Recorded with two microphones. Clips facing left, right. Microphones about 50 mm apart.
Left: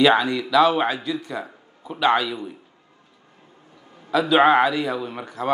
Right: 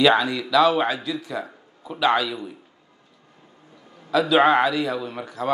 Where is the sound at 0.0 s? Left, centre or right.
Centre.